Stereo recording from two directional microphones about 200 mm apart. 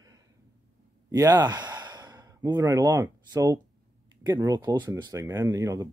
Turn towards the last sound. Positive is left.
turn(degrees=-15)  # may be behind; listen again after turning